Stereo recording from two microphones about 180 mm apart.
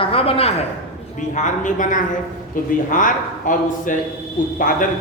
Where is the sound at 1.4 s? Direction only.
45° left (ahead or behind).